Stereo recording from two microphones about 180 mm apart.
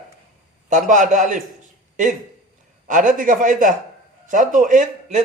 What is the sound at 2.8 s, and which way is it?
A man's voice, 45° right (ahead or behind).